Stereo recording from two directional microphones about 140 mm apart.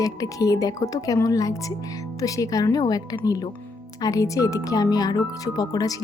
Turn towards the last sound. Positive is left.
turn(degrees=25)  # may be behind; listen again after turning